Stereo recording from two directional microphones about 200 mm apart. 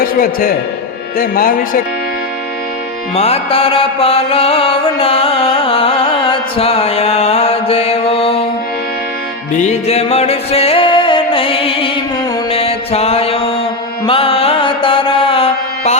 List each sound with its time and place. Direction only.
0.0 s a man's voice: 45° left (ahead or behind)
3.2 s mantra: 30° left (ahead or behind)
9.5 s music: 35° left (ahead or behind)
12.5 s mantra: 30° left (ahead or behind)
14.0 s music: 25° left (ahead or behind)